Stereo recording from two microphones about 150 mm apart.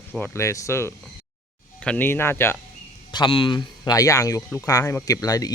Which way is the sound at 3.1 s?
35° left (ahead or behind).